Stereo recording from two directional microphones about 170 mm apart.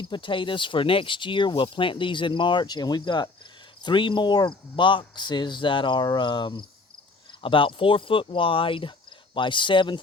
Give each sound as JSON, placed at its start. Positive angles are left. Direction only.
{"t": 0.0, "sound": "speech", "side_deg": 30}